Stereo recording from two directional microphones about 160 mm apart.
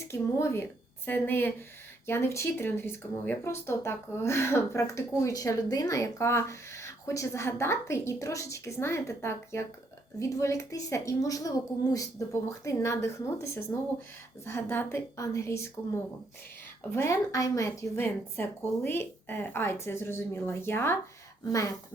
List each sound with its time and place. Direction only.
0.0 s a woman's voice: 15° left (ahead or behind)
16.9 s speech: 20° left (ahead or behind)